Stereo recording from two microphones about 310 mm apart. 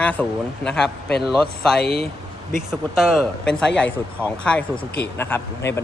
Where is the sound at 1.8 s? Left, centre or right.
Left.